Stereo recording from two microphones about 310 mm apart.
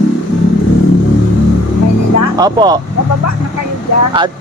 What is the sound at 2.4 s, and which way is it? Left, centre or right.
Speech, centre.